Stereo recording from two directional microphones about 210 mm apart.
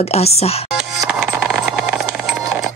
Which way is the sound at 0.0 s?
30° left (ahead or behind).